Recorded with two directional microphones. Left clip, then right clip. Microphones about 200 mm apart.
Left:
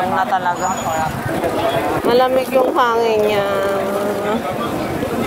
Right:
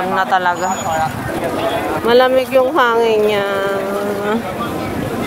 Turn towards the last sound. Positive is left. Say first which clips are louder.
# right 1 dB
turn(degrees=-30)  # may be behind; listen again after turning